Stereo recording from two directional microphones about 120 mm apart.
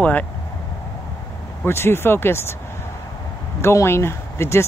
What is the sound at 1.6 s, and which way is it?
Speech, 20° left (ahead or behind).